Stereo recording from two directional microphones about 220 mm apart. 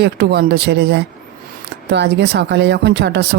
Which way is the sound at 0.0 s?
45° right (ahead or behind).